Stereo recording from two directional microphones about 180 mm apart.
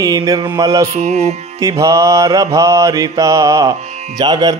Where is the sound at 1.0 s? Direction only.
35° right (ahead or behind).